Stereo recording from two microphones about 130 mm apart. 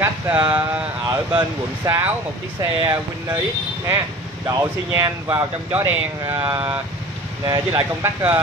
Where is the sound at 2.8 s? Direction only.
20° right (ahead or behind).